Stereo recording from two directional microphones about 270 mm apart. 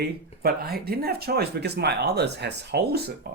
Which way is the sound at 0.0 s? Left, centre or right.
Right.